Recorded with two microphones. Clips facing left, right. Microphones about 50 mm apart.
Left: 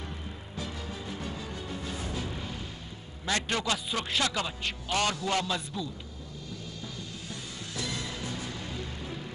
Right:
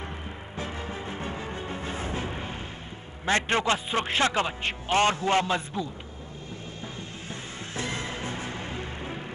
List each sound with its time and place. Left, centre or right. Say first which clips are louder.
0.6 s music: right 4 dB; right
3.3 s a man's voice: right 6 dB; right
7.0 s music: right 3 dB; right